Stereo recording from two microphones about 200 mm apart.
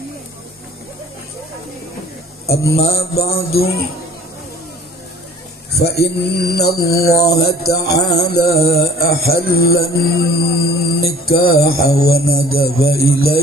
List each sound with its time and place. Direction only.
2.9 s music: 50° left (ahead or behind)
5.8 s music: 55° left (ahead or behind)
8.5 s mantra: 15° left (ahead or behind)
9.0 s music: 50° left (ahead or behind)